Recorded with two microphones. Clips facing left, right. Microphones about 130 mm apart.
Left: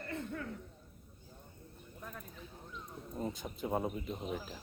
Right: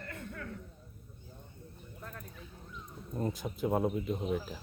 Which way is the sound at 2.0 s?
5° left (ahead or behind).